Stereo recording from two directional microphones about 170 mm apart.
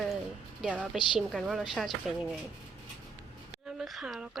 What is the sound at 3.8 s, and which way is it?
Speech, centre (ahead or behind).